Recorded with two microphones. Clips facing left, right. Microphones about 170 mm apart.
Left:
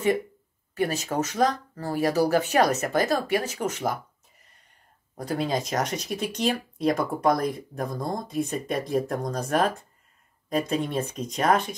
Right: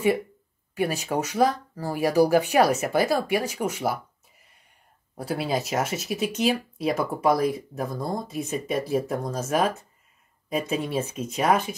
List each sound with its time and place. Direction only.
0.7 s speech: 10° right (ahead or behind)
3.5 s a sound: 10° right (ahead or behind)
5.1 s speech: 5° right (ahead or behind)